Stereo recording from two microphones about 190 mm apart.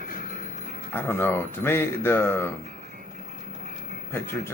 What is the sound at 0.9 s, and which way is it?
Speech, 10° left (ahead or behind).